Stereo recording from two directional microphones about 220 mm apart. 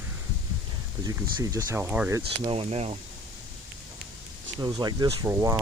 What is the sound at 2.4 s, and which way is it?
Speech, 25° right (ahead or behind).